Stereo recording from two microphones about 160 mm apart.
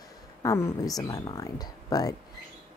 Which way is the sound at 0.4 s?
20° left (ahead or behind).